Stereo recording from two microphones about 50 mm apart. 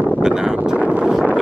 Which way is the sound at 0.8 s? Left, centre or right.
Right.